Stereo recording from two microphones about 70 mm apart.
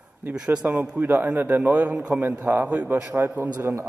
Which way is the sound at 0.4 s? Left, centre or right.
Centre.